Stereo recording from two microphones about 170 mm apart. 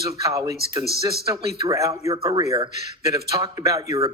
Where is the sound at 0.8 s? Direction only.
65° right (ahead or behind).